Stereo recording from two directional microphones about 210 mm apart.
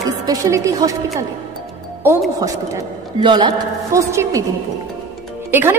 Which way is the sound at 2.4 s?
15° right (ahead or behind).